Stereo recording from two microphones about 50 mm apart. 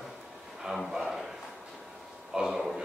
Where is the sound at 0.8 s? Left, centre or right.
Centre.